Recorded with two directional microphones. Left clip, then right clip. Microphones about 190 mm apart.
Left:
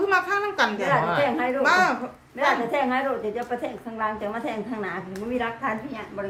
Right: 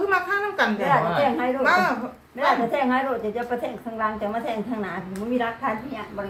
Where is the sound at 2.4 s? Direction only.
20° left (ahead or behind).